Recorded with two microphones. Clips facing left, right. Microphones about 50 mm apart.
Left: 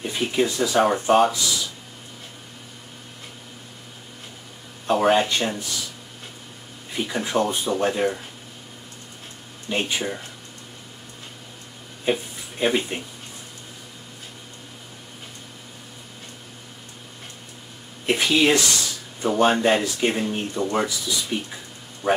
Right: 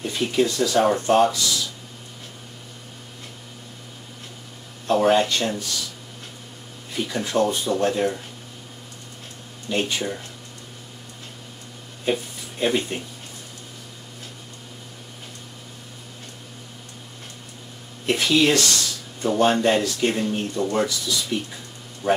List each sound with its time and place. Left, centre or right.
0.0 s speech: centre
4.8 s speech: centre
6.9 s speech: centre
9.7 s speech: centre
12.0 s a sound: centre
18.0 s speech: centre